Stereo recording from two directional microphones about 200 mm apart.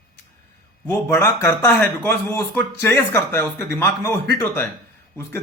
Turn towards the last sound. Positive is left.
turn(degrees=10)  # may be behind; listen again after turning